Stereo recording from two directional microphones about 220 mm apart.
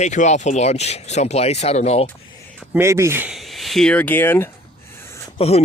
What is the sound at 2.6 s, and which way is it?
Speech, 10° right (ahead or behind).